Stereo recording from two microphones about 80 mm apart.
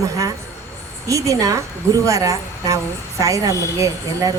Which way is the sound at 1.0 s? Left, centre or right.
Right.